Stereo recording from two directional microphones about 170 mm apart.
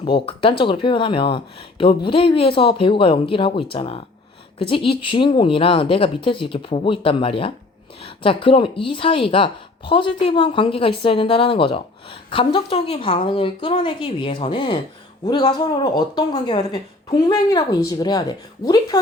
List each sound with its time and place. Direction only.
0.0 s speech: 30° left (ahead or behind)